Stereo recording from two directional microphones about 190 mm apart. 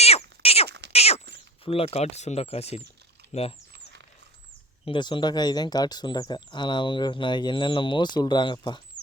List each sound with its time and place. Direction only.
0.0 s cat: 30° left (ahead or behind)
1.6 s speech: 30° left (ahead or behind)
4.9 s speech: 25° left (ahead or behind)